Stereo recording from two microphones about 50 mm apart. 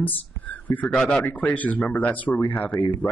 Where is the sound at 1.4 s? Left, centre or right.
Left.